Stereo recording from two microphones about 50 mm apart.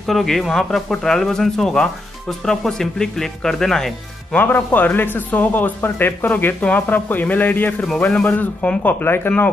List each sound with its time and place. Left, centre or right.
0.0 s speech: centre
4.4 s speech: left